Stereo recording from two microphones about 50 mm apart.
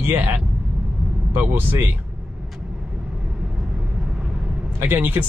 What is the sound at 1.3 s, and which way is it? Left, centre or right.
Speech, right.